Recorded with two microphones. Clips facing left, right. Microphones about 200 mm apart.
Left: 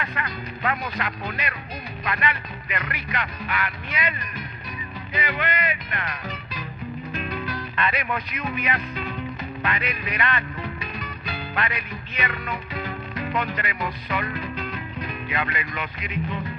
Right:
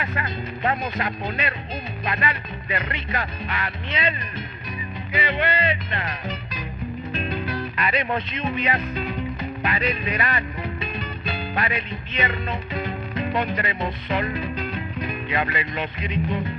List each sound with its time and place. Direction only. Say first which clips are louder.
0.0 s music: right 2 dB; 25° right (ahead or behind)